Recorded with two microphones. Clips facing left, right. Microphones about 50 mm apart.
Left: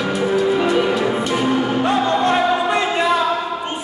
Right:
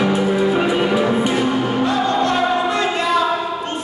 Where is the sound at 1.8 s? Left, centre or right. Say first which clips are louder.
Left 1 dB; left.